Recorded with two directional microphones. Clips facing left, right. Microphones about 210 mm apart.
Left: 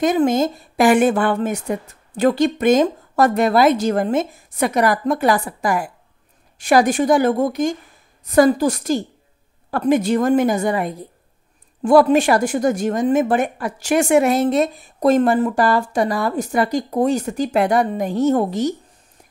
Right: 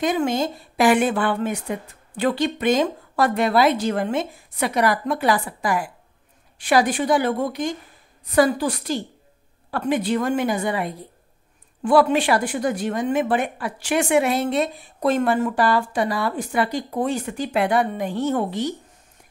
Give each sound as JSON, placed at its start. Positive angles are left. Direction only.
{"t": 0.0, "sound": "a woman's voice", "side_deg": 45}